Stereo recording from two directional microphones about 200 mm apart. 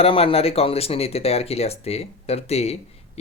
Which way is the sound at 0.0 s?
30° left (ahead or behind).